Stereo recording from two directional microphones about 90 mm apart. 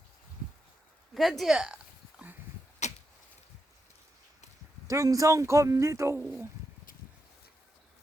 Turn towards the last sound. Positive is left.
turn(degrees=-30)  # may be behind; listen again after turning